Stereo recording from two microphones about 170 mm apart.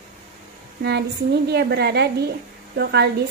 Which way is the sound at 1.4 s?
75° right (ahead or behind).